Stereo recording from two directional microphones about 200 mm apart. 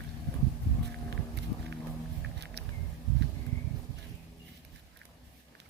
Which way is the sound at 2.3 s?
60° right (ahead or behind).